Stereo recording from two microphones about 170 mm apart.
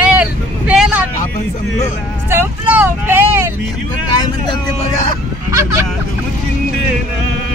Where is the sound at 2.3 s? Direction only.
15° right (ahead or behind).